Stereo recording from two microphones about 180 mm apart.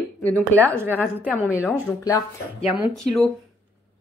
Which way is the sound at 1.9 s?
20° left (ahead or behind).